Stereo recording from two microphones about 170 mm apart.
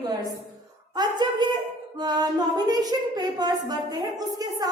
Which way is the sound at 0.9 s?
25° right (ahead or behind).